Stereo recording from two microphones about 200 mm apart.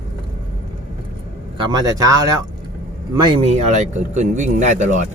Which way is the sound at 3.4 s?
35° right (ahead or behind).